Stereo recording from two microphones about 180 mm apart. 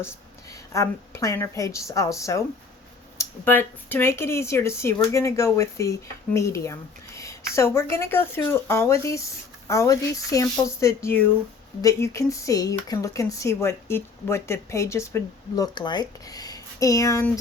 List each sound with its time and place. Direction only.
0.7 s speech: 15° left (ahead or behind)